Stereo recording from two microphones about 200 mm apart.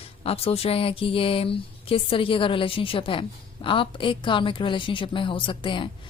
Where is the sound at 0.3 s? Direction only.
30° left (ahead or behind).